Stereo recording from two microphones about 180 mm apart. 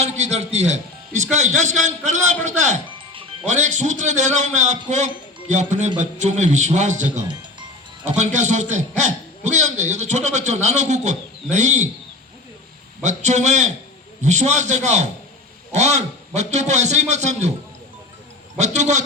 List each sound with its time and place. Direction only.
0.0 s a man's voice: 40° right (ahead or behind)
13.0 s a man's voice: 40° right (ahead or behind)
18.5 s a man's voice: 40° right (ahead or behind)